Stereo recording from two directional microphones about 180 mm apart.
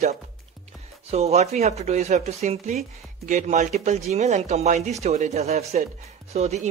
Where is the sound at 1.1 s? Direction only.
35° right (ahead or behind).